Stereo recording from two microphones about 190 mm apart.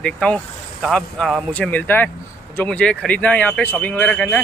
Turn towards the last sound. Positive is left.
turn(degrees=5)  # may be behind; listen again after turning